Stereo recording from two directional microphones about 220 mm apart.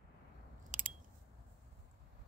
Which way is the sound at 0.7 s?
35° right (ahead or behind).